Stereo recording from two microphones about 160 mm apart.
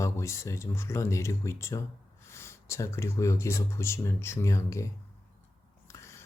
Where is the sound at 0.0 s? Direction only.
20° left (ahead or behind).